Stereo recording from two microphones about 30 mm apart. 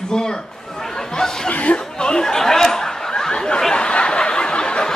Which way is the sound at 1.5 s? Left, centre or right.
Left.